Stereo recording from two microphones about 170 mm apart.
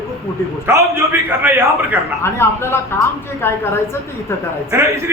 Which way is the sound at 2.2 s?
15° left (ahead or behind).